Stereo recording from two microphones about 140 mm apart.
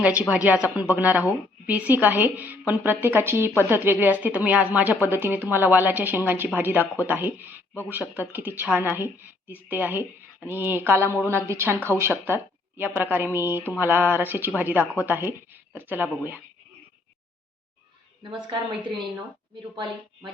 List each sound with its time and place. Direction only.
0.0 s a woman's voice: 10° right (ahead or behind)
18.2 s a woman's voice: 35° right (ahead or behind)